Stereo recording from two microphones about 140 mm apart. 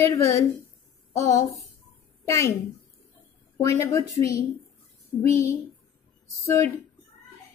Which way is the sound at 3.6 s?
20° left (ahead or behind).